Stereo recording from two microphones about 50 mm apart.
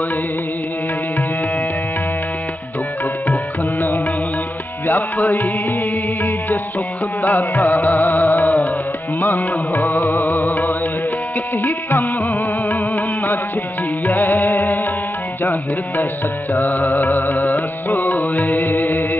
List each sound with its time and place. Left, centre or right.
4.8 s music: left
7.2 s music: left
9.8 s music: left
12.2 s music: left
16.5 s music: left